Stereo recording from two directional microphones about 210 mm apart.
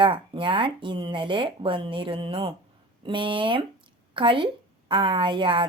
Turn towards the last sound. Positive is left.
turn(degrees=-25)  # may be behind; listen again after turning